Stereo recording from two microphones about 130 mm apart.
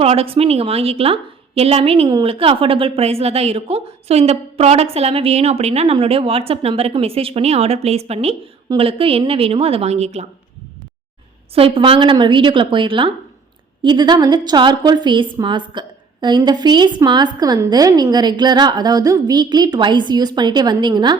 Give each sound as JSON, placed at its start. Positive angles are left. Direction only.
{"t": 0.0, "sound": "a woman's voice", "side_deg": -50}
{"t": 11.5, "sound": "a woman's voice", "side_deg": -45}